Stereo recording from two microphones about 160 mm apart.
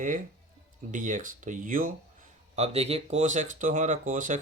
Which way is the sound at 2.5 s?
40° right (ahead or behind).